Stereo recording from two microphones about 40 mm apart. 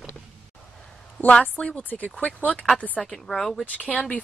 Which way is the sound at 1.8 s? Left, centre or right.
Left.